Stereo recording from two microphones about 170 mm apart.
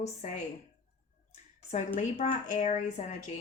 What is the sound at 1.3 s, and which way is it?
Speech, 40° left (ahead or behind).